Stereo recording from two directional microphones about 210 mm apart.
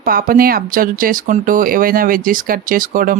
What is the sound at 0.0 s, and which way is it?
Speech, 45° right (ahead or behind).